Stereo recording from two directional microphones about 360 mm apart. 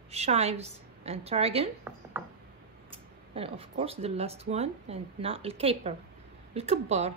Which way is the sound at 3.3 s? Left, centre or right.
Centre.